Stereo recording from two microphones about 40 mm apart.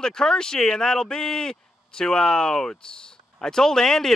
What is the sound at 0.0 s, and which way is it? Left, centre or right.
Speech, centre.